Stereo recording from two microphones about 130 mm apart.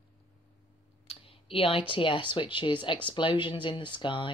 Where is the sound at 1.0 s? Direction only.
45° left (ahead or behind).